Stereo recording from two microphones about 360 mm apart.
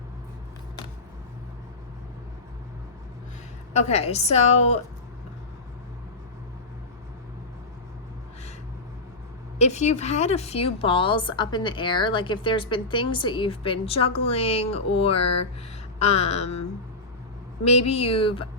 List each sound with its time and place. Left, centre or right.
3.7 s a woman's voice: centre
9.6 s a woman's voice: centre